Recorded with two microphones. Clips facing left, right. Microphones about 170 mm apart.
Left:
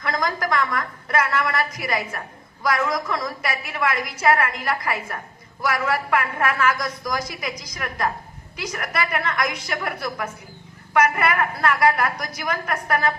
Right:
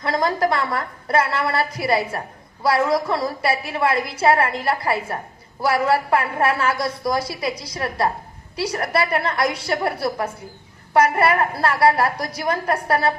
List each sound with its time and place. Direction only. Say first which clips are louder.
0.0 s a woman's voice: right 5 dB; 30° right (ahead or behind)